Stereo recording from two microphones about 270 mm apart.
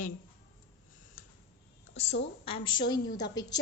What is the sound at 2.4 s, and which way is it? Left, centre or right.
A woman's voice, centre.